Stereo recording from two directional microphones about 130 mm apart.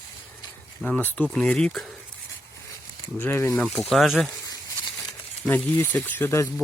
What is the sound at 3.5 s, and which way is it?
Speech, 5° left (ahead or behind).